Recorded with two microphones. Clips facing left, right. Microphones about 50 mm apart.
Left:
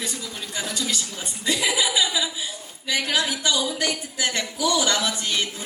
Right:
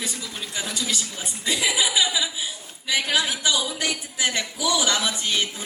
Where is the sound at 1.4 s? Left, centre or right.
Centre.